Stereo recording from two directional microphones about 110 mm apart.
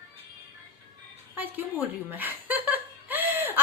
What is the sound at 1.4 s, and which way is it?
Speech, 20° right (ahead or behind).